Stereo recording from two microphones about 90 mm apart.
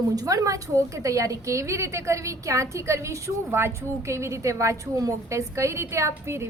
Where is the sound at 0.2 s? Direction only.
40° right (ahead or behind).